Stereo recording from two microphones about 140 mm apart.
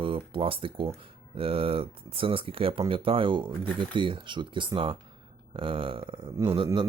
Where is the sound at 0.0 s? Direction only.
40° right (ahead or behind).